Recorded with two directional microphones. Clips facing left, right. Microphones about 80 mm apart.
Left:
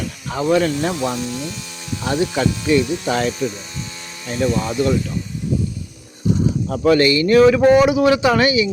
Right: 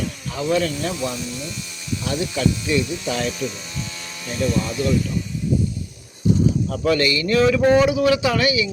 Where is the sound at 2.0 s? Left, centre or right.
Left.